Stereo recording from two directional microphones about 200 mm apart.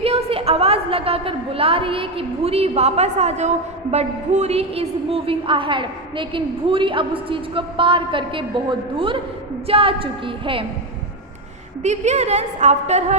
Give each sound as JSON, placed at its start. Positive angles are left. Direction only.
{"t": 0.0, "sound": "a woman's voice", "side_deg": -30}
{"t": 11.8, "sound": "a woman's voice", "side_deg": -35}